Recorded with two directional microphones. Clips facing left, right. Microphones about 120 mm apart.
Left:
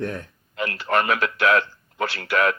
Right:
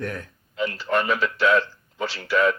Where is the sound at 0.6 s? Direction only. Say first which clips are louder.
Left 1 dB; 60° left (ahead or behind).